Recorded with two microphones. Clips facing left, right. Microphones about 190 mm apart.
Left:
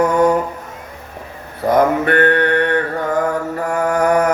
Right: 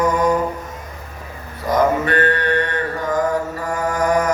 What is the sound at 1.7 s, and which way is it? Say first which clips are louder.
Mantra: left 3 dB; 60° left (ahead or behind).